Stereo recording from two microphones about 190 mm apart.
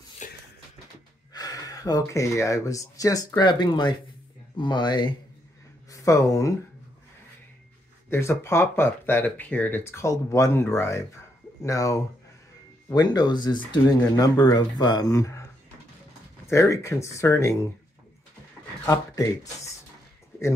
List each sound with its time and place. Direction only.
0.2 s a sound: 40° left (ahead or behind)
1.3 s speech: 20° left (ahead or behind)
8.1 s speech: 15° left (ahead or behind)
16.4 s speech: 15° left (ahead or behind)
18.9 s speech: 15° left (ahead or behind)